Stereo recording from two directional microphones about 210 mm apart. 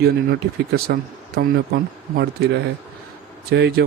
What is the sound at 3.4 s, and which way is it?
Speech, 50° right (ahead or behind).